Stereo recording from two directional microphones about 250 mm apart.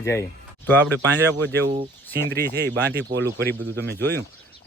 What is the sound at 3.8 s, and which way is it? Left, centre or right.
Speech, right.